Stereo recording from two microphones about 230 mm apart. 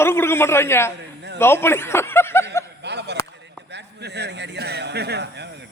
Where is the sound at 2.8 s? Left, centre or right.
Right.